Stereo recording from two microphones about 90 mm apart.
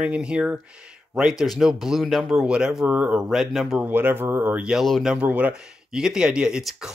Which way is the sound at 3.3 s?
5° right (ahead or behind).